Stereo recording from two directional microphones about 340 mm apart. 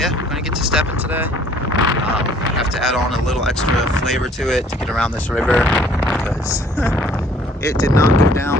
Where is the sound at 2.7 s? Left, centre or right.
Centre.